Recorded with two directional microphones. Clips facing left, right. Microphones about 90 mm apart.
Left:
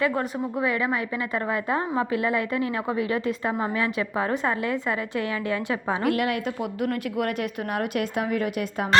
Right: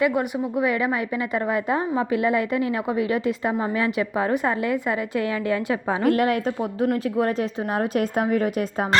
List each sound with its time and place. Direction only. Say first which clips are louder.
0.0 s a woman's voice: right 3 dB; 15° right (ahead or behind)
6.1 s a woman's voice: right 6 dB; 40° right (ahead or behind)